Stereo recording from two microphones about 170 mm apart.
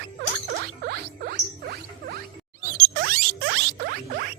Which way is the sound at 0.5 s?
70° right (ahead or behind).